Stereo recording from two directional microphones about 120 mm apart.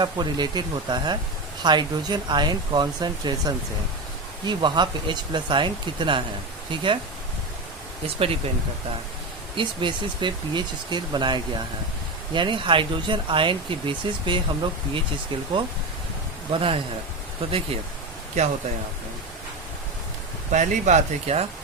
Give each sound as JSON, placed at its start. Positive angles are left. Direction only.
{"t": 0.0, "sound": "speech", "side_deg": -35}
{"t": 8.0, "sound": "speech", "side_deg": -50}
{"t": 9.6, "sound": "speech", "side_deg": -40}
{"t": 16.5, "sound": "speech", "side_deg": -50}
{"t": 20.5, "sound": "speech", "side_deg": -90}